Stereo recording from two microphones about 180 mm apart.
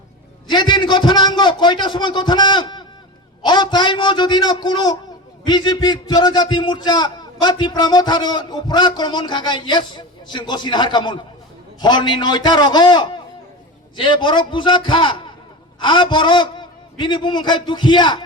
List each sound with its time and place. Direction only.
0.4 s a man's voice: 25° left (ahead or behind)